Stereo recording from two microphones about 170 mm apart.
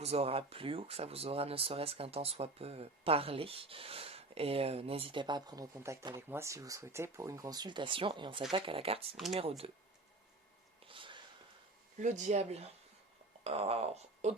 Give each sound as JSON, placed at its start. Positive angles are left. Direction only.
{"t": 0.0, "sound": "speech", "side_deg": -35}
{"t": 10.8, "sound": "a sound", "side_deg": -30}
{"t": 11.9, "sound": "speech", "side_deg": -45}